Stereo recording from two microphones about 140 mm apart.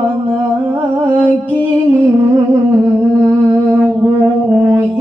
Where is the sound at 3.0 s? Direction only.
25° right (ahead or behind).